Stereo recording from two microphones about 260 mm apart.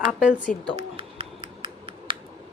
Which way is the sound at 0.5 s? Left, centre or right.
Centre.